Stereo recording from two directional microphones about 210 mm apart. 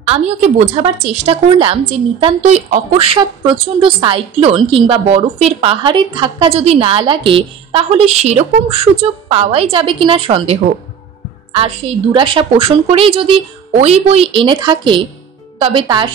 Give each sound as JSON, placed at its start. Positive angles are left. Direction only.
{"t": 0.0, "sound": "a woman's voice", "side_deg": -30}